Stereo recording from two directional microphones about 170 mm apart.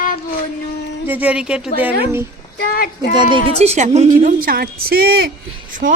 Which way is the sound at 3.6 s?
40° right (ahead or behind).